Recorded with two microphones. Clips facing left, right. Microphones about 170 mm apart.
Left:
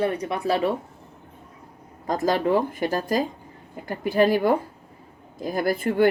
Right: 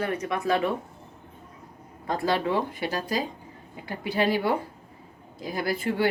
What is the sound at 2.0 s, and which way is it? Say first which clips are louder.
A woman's voice: left 4 dB; 40° left (ahead or behind).